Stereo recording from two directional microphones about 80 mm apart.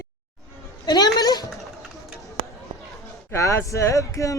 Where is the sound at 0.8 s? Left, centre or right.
Left.